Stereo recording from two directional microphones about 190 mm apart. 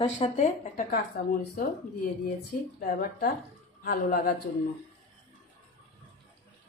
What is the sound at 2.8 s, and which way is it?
Speech, 45° left (ahead or behind).